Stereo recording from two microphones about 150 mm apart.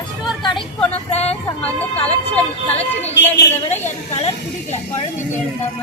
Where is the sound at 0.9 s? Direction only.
45° left (ahead or behind).